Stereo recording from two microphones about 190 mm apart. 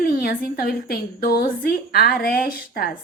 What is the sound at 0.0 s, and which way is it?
A woman's voice, 50° left (ahead or behind).